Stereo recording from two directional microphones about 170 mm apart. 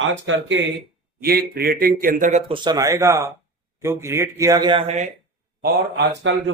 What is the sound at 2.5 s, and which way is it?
A man's voice, 25° right (ahead or behind).